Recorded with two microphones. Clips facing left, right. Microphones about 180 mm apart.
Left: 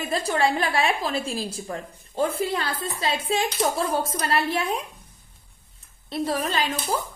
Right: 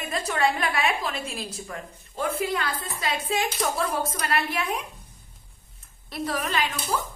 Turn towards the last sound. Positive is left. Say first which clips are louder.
# left 2 dB
turn(degrees=30)  # may be behind; listen again after turning